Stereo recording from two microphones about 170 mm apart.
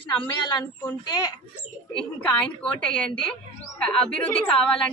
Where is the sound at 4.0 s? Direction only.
5° left (ahead or behind).